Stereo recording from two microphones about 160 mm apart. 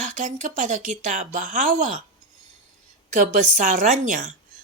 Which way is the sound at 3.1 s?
50° right (ahead or behind).